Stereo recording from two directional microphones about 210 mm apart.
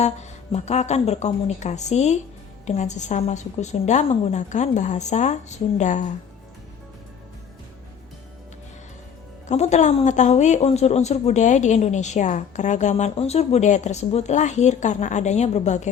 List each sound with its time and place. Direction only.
0.0 s a woman's voice: 30° left (ahead or behind)
9.5 s a woman's voice: 35° left (ahead or behind)